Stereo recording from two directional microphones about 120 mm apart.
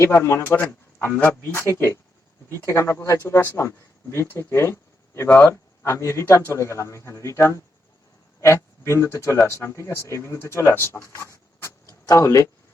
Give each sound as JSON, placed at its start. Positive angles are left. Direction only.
{"t": 0.1, "sound": "a man's voice", "side_deg": 20}